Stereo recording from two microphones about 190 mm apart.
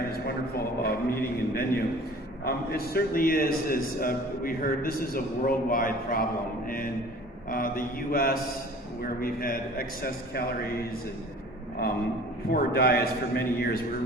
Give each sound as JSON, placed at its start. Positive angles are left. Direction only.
{"t": 0.1, "sound": "a man's voice", "side_deg": 55}
{"t": 12.5, "sound": "a man's voice", "side_deg": 55}